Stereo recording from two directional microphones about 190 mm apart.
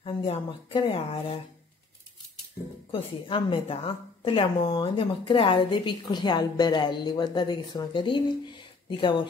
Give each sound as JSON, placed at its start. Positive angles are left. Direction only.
{"t": 0.0, "sound": "a woman's voice", "side_deg": 25}
{"t": 2.9, "sound": "a woman's voice", "side_deg": 25}